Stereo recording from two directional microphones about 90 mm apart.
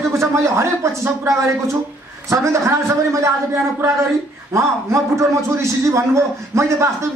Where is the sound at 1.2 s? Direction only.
35° right (ahead or behind).